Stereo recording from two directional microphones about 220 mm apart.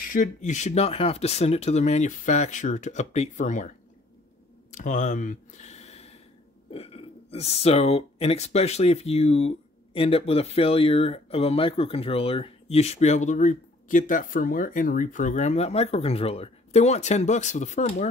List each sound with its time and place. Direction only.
0.0 s speech: 35° left (ahead or behind)
4.7 s speech: 35° left (ahead or behind)